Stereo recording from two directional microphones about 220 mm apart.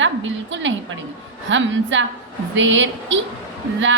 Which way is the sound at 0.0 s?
55° right (ahead or behind).